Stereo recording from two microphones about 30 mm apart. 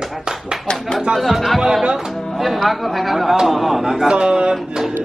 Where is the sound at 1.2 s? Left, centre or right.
Centre.